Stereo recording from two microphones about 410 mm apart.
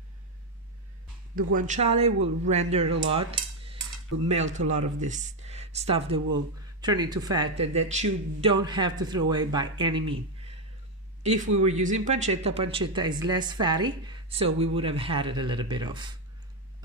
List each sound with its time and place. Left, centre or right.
1.3 s speech: centre
11.5 s speech: centre